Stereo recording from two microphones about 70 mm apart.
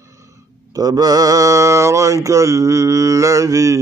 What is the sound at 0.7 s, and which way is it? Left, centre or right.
Speech, right.